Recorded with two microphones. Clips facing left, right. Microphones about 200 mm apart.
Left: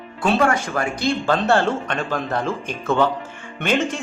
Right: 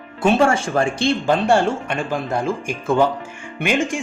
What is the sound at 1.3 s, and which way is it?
Speech, 15° right (ahead or behind).